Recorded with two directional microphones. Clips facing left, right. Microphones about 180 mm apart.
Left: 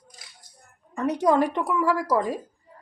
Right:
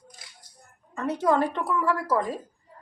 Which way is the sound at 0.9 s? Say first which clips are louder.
Left 3 dB; 15° left (ahead or behind).